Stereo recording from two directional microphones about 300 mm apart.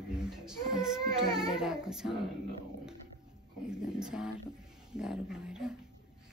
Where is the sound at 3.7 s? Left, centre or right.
Centre.